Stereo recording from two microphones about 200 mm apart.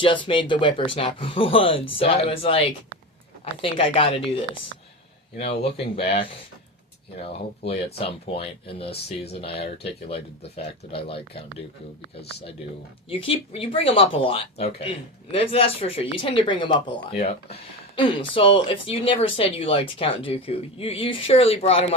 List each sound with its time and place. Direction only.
0.0 s speech: 25° left (ahead or behind)
5.4 s speech: 30° left (ahead or behind)
13.1 s speech: 25° left (ahead or behind)